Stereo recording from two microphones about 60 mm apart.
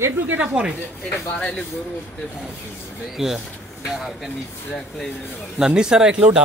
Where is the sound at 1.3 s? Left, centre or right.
Centre.